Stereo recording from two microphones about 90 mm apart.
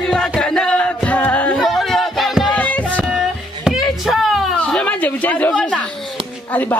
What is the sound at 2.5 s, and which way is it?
Music, 15° left (ahead or behind).